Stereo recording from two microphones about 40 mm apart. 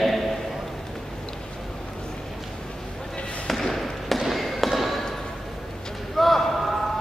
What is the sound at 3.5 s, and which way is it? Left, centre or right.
Basketball bounce, centre.